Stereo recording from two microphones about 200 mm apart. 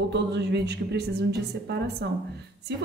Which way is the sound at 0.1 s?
60° right (ahead or behind).